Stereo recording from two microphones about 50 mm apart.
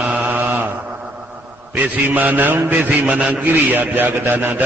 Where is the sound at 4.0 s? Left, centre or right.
Right.